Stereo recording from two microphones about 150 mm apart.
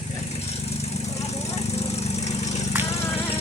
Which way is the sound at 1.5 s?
45° left (ahead or behind).